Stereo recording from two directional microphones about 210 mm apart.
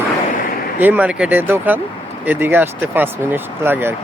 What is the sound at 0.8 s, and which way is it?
Speech, 10° right (ahead or behind).